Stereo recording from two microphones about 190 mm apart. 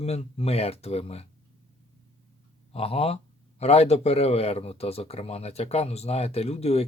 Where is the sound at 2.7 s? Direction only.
30° left (ahead or behind).